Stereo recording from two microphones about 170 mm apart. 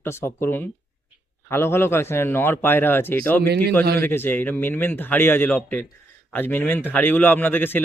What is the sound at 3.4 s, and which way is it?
Speech, 65° right (ahead or behind).